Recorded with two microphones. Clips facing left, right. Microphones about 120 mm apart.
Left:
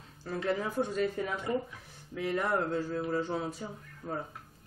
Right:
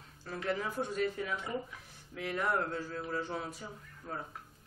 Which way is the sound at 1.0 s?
40° left (ahead or behind).